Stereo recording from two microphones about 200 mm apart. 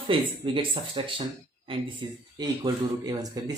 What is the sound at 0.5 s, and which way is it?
Speech, 25° right (ahead or behind).